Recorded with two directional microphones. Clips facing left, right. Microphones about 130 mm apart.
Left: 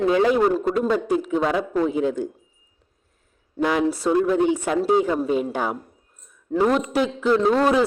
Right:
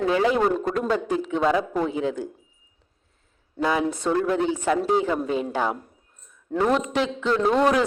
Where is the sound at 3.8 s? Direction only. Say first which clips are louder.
Left 3 dB; 10° left (ahead or behind).